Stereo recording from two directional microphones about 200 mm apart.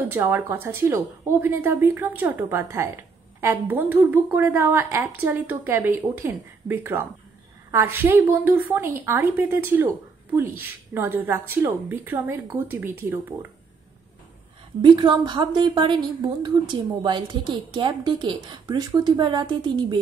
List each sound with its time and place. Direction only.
0.1 s a woman's voice: 10° right (ahead or behind)
14.8 s a woman's voice: 20° right (ahead or behind)